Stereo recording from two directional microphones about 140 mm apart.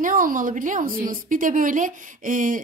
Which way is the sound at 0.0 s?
75° right (ahead or behind).